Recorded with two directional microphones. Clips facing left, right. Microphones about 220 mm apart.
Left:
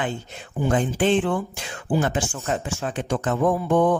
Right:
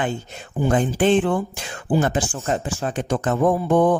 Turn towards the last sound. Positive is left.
turn(degrees=-35)  # may be behind; listen again after turning